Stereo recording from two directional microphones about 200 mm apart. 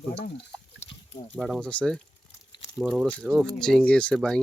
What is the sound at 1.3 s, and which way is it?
Speech, centre (ahead or behind).